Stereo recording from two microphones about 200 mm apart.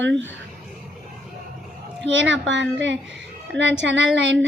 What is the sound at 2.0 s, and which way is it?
A woman's voice, 65° right (ahead or behind).